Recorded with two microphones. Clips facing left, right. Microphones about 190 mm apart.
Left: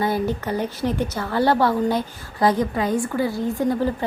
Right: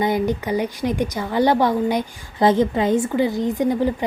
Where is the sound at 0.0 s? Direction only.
15° right (ahead or behind).